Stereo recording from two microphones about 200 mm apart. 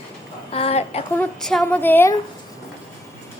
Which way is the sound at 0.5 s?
30° left (ahead or behind).